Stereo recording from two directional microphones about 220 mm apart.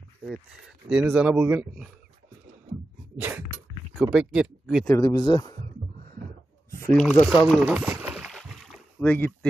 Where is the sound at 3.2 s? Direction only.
10° right (ahead or behind).